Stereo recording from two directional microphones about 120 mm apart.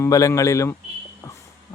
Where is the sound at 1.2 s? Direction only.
25° left (ahead or behind).